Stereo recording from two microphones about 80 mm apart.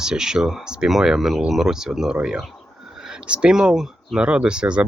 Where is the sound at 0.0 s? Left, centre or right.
Centre.